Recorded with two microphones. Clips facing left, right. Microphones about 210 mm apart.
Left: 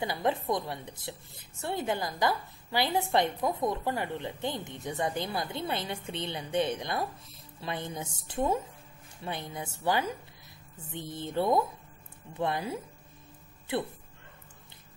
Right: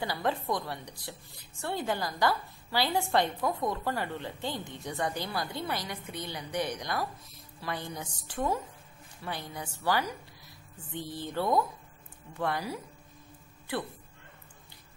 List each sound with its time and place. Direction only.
0.0 s a woman's voice: 20° left (ahead or behind)